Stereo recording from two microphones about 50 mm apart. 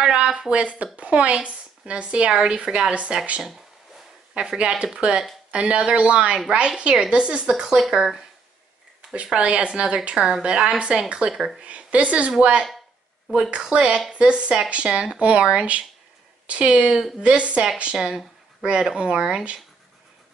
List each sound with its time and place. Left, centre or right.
0.0 s speech: centre
4.4 s speech: centre
9.1 s speech: right; by 11.6 s centre
11.6 s speech: right